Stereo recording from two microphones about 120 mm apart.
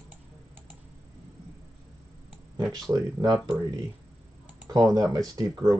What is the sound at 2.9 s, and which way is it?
Speech, 30° right (ahead or behind).